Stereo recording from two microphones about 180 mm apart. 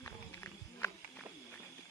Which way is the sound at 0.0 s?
10° left (ahead or behind).